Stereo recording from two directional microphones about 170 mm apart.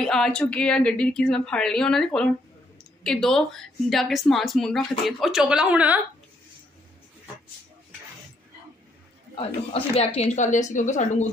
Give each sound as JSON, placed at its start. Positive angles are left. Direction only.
{"t": 0.0, "sound": "a woman's voice", "side_deg": 5}
{"t": 9.3, "sound": "a woman's voice", "side_deg": 35}